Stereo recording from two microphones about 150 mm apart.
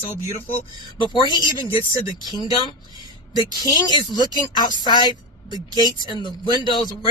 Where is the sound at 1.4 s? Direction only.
30° left (ahead or behind).